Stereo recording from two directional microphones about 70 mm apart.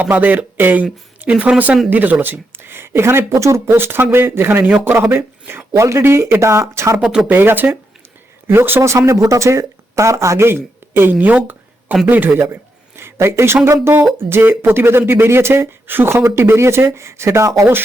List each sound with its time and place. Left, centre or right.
0.0 s speech: right
7.0 s speech: centre
7.3 s speech: right
13.1 s speech: right